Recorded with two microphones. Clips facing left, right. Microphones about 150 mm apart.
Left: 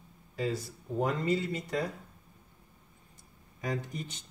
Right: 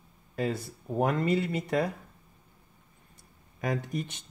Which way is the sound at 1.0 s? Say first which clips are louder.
Right 3 dB; 55° right (ahead or behind).